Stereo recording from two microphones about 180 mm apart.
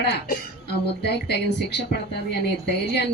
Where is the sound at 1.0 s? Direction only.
70° left (ahead or behind).